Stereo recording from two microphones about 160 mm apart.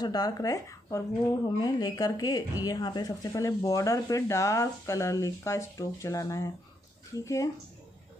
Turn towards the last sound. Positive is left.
turn(degrees=20)  # may be behind; listen again after turning